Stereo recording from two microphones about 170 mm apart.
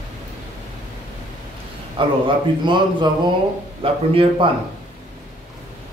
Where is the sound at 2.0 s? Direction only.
30° right (ahead or behind).